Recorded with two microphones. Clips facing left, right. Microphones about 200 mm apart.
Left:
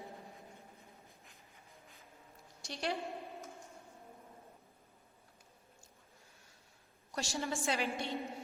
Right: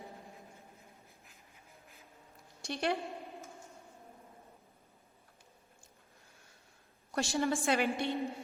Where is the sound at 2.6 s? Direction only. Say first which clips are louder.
Right 5 dB; 55° right (ahead or behind).